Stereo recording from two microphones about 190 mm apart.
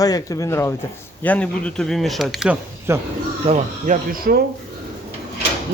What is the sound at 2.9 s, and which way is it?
Speech, 15° right (ahead or behind).